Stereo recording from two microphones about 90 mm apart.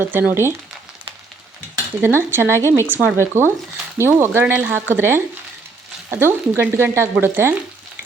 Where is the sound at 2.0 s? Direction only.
25° right (ahead or behind).